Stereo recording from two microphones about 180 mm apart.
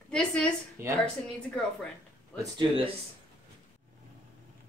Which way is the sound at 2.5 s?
30° right (ahead or behind).